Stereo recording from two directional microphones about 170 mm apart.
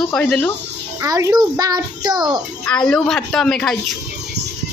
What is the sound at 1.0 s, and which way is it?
A child's voice, 20° right (ahead or behind).